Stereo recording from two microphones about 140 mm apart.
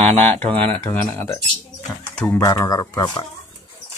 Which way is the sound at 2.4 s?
25° left (ahead or behind).